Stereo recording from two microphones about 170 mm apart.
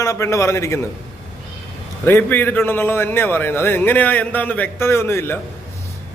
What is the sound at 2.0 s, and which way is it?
A man's voice, 10° left (ahead or behind).